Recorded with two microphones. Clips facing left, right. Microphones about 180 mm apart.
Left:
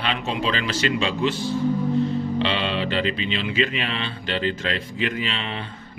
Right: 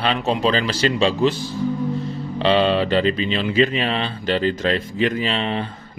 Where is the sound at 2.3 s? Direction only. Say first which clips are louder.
Right 7 dB; 40° right (ahead or behind).